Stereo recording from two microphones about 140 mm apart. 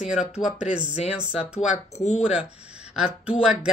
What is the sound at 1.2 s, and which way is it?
Speech, 5° right (ahead or behind).